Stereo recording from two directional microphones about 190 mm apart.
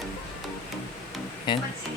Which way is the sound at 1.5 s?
25° left (ahead or behind).